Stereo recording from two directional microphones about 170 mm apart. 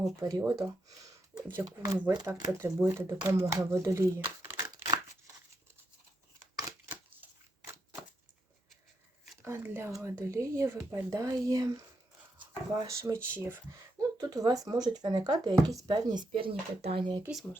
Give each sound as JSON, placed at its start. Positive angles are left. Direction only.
{"t": 0.2, "sound": "speech", "side_deg": -20}
{"t": 6.6, "sound": "a sound", "side_deg": -15}
{"t": 9.4, "sound": "speech", "side_deg": -15}